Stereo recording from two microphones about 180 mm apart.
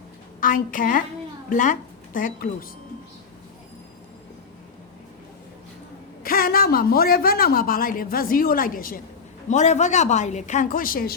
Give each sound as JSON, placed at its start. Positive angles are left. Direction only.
{"t": 0.3, "sound": "a woman's voice", "side_deg": 50}
{"t": 6.2, "sound": "a woman's voice", "side_deg": 55}
{"t": 9.5, "sound": "speech", "side_deg": 40}